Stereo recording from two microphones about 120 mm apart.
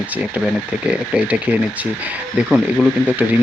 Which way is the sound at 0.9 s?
10° right (ahead or behind).